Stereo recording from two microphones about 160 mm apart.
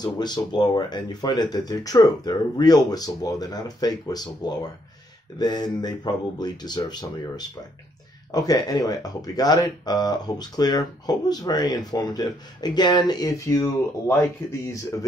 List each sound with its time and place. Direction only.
0.0 s speech: 25° left (ahead or behind)
14.9 s speech: 15° left (ahead or behind)